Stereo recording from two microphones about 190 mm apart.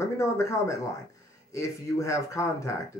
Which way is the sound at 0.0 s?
15° left (ahead or behind).